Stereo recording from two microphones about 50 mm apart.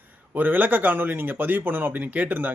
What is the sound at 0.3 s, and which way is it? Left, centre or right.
Speech, right.